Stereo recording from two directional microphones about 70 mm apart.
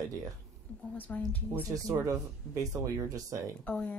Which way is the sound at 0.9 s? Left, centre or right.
Left.